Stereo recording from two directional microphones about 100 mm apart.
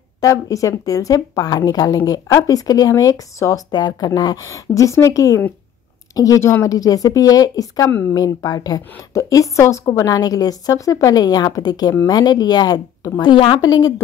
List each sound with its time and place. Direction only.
0.2 s a woman's voice: 35° left (ahead or behind)
4.5 s a woman's voice: 30° left (ahead or behind)